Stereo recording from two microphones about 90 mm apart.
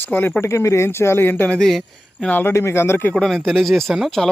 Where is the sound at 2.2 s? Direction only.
20° left (ahead or behind).